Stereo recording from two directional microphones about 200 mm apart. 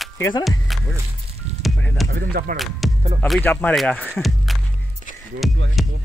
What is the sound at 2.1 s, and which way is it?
Speech, 45° right (ahead or behind).